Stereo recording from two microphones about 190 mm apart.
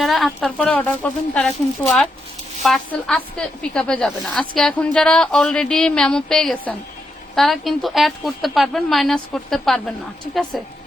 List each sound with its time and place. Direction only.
0.0 s speech: centre (ahead or behind)
2.6 s speech: centre (ahead or behind)